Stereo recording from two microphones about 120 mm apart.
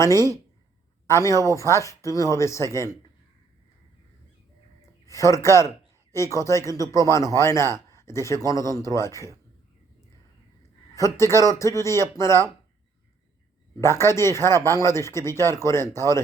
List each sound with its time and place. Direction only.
0.0 s speech: 25° left (ahead or behind)
5.0 s a man's voice: 25° left (ahead or behind)
10.9 s speech: 25° left (ahead or behind)
13.8 s speech: 20° left (ahead or behind)